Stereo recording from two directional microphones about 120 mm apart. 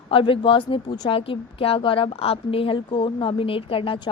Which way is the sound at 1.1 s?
50° left (ahead or behind).